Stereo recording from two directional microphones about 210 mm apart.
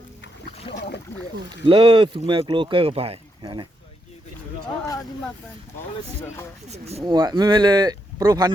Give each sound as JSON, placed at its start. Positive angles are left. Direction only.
{"t": 1.1, "sound": "speech", "side_deg": 10}
{"t": 1.6, "sound": "speech", "side_deg": -25}
{"t": 6.7, "sound": "speech", "side_deg": -30}
{"t": 7.0, "sound": "speech", "side_deg": -20}